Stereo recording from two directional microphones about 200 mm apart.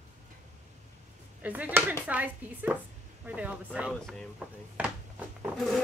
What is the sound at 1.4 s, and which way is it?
Speech, 10° right (ahead or behind).